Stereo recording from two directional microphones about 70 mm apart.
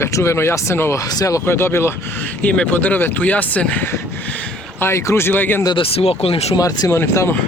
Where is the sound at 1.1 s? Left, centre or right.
Left.